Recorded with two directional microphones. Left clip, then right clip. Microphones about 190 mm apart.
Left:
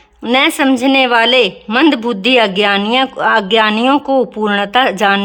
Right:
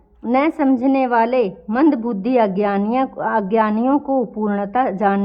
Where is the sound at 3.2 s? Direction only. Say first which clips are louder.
Left 7 dB; 5° left (ahead or behind).